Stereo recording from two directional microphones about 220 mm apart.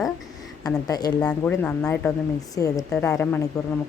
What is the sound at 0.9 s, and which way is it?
Speech, 15° left (ahead or behind).